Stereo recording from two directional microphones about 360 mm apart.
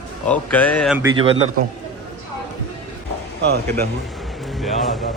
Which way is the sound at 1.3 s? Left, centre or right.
Right.